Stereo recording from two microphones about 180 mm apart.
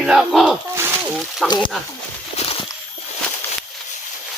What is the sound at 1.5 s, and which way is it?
Speech, 25° left (ahead or behind).